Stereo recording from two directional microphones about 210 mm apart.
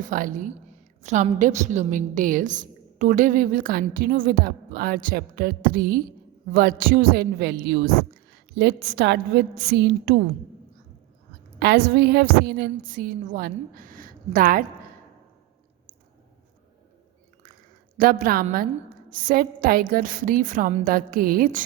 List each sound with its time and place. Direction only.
0.1 s a woman's voice: 40° right (ahead or behind)
11.6 s a woman's voice: 55° right (ahead or behind)
17.9 s a woman's voice: 40° right (ahead or behind)